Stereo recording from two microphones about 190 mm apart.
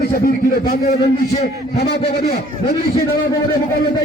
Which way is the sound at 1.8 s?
60° left (ahead or behind).